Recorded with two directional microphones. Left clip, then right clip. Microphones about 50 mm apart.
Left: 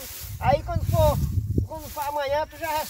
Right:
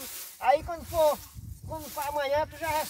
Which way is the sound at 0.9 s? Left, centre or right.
Left.